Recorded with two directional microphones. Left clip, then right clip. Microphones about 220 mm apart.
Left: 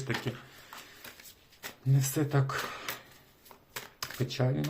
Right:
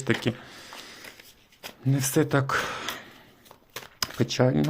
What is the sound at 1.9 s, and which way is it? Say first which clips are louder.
Speech: right 8 dB; 55° right (ahead or behind).